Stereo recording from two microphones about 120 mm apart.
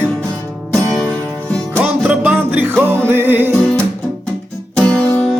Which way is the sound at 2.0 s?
15° right (ahead or behind).